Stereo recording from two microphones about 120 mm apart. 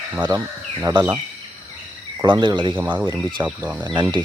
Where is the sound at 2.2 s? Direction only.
40° right (ahead or behind).